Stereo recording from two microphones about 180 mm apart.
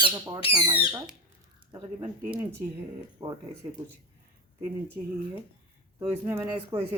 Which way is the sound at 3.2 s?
25° right (ahead or behind).